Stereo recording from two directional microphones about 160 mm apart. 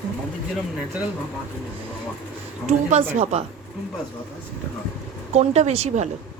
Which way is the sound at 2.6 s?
45° right (ahead or behind).